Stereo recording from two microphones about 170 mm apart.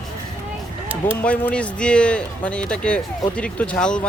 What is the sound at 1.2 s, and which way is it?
A man's voice, 10° left (ahead or behind).